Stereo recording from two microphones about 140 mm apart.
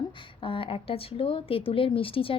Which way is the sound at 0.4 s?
40° left (ahead or behind).